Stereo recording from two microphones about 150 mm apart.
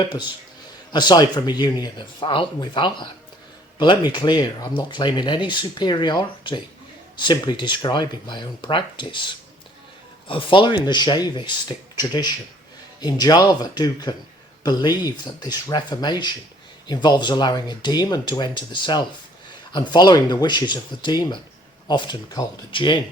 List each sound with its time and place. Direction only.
0.9 s speech: 30° left (ahead or behind)